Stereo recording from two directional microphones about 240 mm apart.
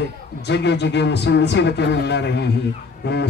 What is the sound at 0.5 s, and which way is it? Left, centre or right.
A man's voice, left.